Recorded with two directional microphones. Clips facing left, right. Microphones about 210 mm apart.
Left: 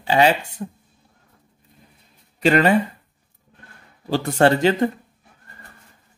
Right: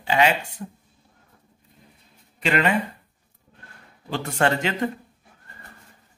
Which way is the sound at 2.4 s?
40° left (ahead or behind).